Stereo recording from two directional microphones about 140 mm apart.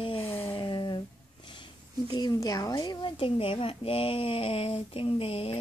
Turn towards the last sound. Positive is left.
turn(degrees=40)  # may be behind; listen again after turning